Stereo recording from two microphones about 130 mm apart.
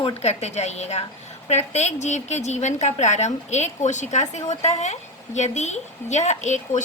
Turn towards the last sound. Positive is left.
turn(degrees=65)  # may be behind; listen again after turning